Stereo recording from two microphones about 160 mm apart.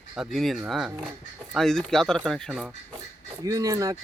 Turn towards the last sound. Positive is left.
turn(degrees=-20)  # may be behind; listen again after turning